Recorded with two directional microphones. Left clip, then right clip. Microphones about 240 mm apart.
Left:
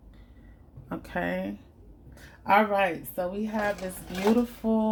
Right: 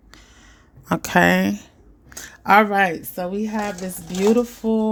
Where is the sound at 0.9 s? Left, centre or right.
Right.